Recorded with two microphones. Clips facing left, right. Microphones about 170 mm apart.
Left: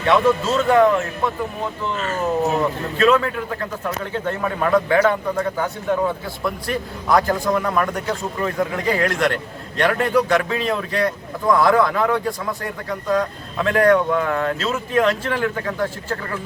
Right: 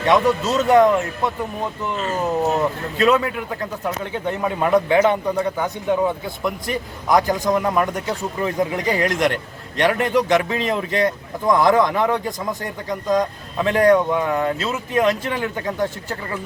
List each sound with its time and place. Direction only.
0.0 s speech: 15° right (ahead or behind)
3.0 s speech: 20° right (ahead or behind)